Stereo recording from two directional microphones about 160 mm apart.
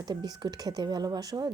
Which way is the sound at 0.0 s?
25° right (ahead or behind).